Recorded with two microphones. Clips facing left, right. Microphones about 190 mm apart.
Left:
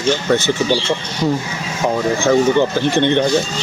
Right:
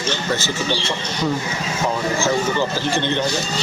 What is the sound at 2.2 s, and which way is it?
Speech, 60° left (ahead or behind).